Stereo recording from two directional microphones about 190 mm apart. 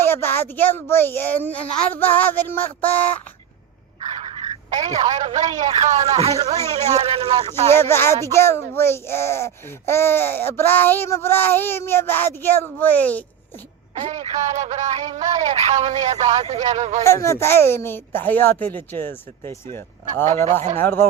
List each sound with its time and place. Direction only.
0.1 s speech: 10° left (ahead or behind)
4.0 s speech: 35° right (ahead or behind)
7.7 s speech: 10° left (ahead or behind)
13.9 s speech: 35° right (ahead or behind)
17.0 s speech: 15° left (ahead or behind)
20.2 s speech: 40° right (ahead or behind)
20.7 s speech: 10° left (ahead or behind)